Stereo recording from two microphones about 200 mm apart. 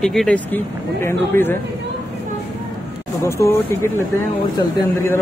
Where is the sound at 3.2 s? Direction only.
15° left (ahead or behind).